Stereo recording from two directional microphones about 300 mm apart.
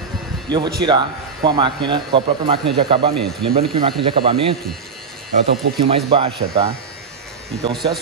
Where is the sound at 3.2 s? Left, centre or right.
Centre.